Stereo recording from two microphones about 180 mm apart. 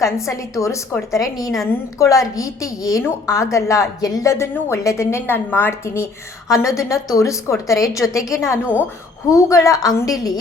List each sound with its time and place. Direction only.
0.0 s a woman's voice: 15° left (ahead or behind)
1.4 s a woman's voice: centre (ahead or behind)
2.0 s a woman's voice: 15° left (ahead or behind)
8.0 s a woman's voice: centre (ahead or behind)
8.3 s a woman's voice: 15° left (ahead or behind)